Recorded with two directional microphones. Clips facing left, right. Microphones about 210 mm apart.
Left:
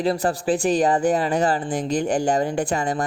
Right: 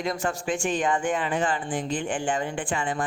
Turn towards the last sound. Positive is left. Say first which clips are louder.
# left 6 dB
turn(degrees=40)  # may be behind; listen again after turning